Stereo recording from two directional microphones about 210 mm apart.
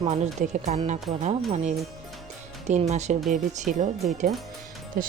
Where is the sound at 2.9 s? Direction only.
35° right (ahead or behind).